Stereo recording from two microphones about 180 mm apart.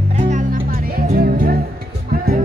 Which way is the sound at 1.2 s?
55° right (ahead or behind).